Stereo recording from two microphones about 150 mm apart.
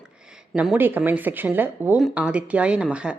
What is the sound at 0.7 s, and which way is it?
A woman's voice, 10° right (ahead or behind).